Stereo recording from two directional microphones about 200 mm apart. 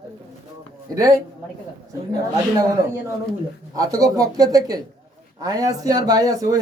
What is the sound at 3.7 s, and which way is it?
Speech, 15° right (ahead or behind).